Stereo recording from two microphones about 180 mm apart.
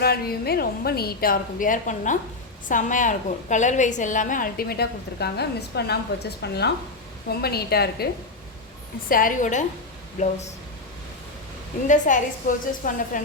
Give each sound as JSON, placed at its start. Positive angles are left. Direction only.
{"t": 0.0, "sound": "a woman's voice", "side_deg": 60}
{"t": 9.0, "sound": "a woman's voice", "side_deg": 50}
{"t": 11.9, "sound": "a woman's voice", "side_deg": 45}